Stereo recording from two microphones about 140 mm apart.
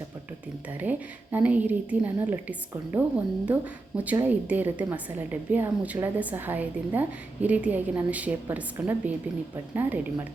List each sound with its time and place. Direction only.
0.8 s a woman's voice: 10° right (ahead or behind)